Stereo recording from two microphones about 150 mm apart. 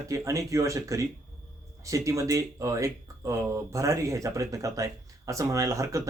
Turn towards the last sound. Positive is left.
turn(degrees=-20)  # may be behind; listen again after turning